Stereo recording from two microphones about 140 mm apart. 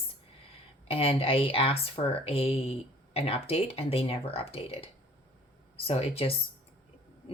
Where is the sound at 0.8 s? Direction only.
40° left (ahead or behind).